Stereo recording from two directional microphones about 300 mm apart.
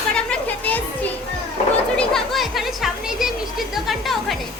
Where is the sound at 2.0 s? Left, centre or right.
Centre.